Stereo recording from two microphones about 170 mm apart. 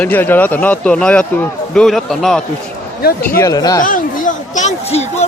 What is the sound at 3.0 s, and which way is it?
Speech, 65° left (ahead or behind).